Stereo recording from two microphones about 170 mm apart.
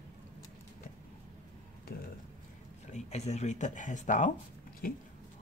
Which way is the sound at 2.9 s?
40° left (ahead or behind).